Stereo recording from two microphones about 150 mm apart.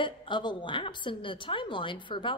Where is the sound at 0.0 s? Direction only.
30° left (ahead or behind).